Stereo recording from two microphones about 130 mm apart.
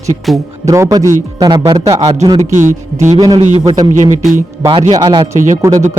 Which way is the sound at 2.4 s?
75° right (ahead or behind).